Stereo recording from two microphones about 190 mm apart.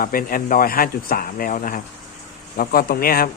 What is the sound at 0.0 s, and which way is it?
Speech, 50° left (ahead or behind).